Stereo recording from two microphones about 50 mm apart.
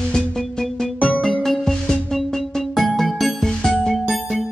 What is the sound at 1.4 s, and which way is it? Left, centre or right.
Music, centre.